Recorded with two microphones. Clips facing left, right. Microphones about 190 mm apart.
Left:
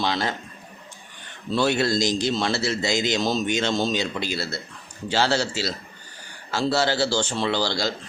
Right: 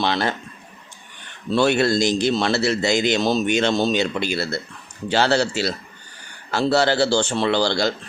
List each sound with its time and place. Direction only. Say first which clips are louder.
0.0 s a man's voice: right 3 dB; 65° right (ahead or behind)
1.5 s a man's voice: right 4 dB; 65° right (ahead or behind)